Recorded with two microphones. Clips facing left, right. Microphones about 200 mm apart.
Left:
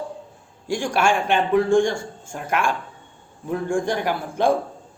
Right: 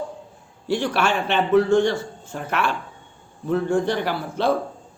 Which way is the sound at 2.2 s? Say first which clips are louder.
Left 2 dB; 10° left (ahead or behind).